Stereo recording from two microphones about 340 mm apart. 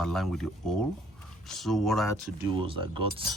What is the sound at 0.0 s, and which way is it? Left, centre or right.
Speech, centre.